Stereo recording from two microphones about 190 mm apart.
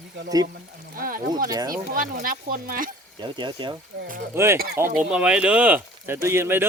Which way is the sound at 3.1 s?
25° right (ahead or behind).